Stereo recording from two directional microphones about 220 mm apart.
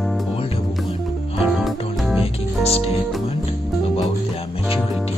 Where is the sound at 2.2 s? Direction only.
25° left (ahead or behind).